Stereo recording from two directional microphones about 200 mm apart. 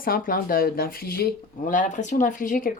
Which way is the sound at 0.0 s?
45° left (ahead or behind).